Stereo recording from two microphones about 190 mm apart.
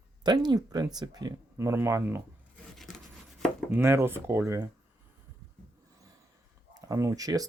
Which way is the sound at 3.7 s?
15° right (ahead or behind).